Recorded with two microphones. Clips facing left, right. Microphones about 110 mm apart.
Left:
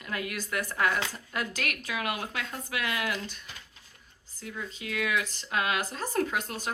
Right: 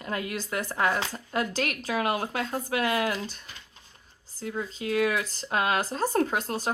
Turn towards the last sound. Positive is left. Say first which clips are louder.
# right 4 dB
turn(degrees=-35)  # may be behind; listen again after turning